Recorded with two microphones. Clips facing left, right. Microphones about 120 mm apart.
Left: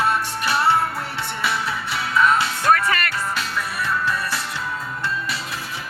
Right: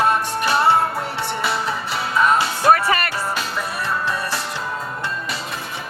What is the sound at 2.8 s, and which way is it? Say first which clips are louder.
Music: right 2 dB; 30° right (ahead or behind).